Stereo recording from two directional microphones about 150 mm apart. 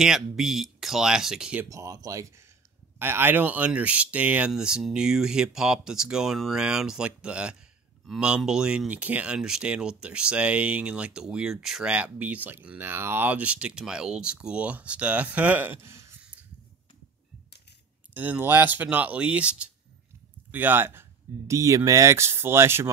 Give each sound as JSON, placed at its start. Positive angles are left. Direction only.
{"t": 0.0, "sound": "speech", "side_deg": -5}
{"t": 1.7, "sound": "speech", "side_deg": -20}
{"t": 18.1, "sound": "speech", "side_deg": -10}